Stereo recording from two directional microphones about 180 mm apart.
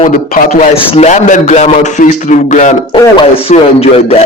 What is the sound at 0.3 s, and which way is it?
A man's voice, 40° left (ahead or behind).